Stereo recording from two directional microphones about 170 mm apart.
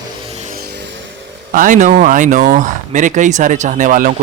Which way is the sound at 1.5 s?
50° right (ahead or behind).